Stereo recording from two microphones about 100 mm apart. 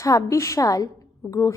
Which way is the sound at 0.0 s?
30° left (ahead or behind).